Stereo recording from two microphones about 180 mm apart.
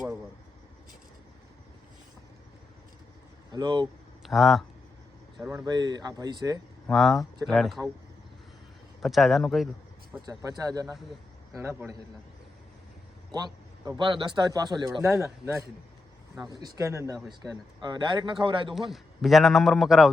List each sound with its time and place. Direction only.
3.5 s a man's voice: 25° right (ahead or behind)
4.2 s speech: centre (ahead or behind)
5.4 s a man's voice: 15° right (ahead or behind)
6.8 s a man's voice: centre (ahead or behind)
9.0 s a man's voice: centre (ahead or behind)
10.2 s a man's voice: 20° right (ahead or behind)
13.3 s a man's voice: 20° right (ahead or behind)
18.7 s a man's voice: centre (ahead or behind)